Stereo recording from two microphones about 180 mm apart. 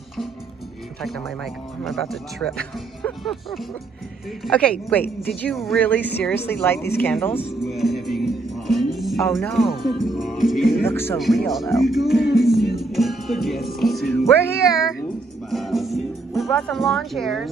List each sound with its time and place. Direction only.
3.0 s speech: centre (ahead or behind)
7.3 s music: centre (ahead or behind)
10.8 s speech: 10° left (ahead or behind)
11.1 s speech: centre (ahead or behind)
12.4 s music: centre (ahead or behind)
14.3 s speech: 15° left (ahead or behind)
15.5 s music: centre (ahead or behind)